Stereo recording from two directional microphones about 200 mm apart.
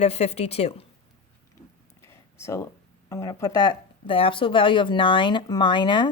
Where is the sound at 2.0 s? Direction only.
15° left (ahead or behind).